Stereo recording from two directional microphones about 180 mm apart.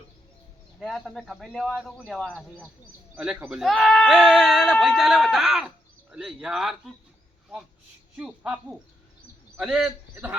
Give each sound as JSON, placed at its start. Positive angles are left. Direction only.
{"t": 0.8, "sound": "speech", "side_deg": 0}
{"t": 8.1, "sound": "speech", "side_deg": -5}
{"t": 9.6, "sound": "speech", "side_deg": 0}